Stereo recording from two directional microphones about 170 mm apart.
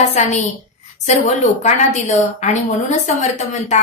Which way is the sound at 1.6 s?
45° left (ahead or behind).